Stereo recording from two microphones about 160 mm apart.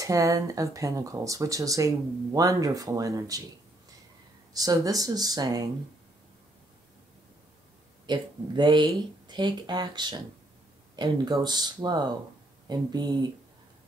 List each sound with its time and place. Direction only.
0.0 s speech: 20° right (ahead or behind)
4.6 s speech: 20° right (ahead or behind)
8.1 s speech: 30° right (ahead or behind)